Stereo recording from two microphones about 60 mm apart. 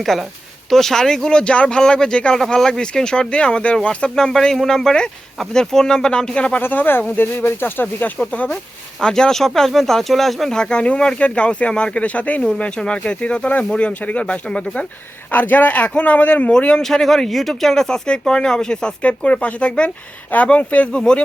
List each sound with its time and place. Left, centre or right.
0.0 s speech: centre
6.6 s speech: left
8.3 s speech: left
9.0 s speech: centre
15.3 s speech: left
16.5 s speech: centre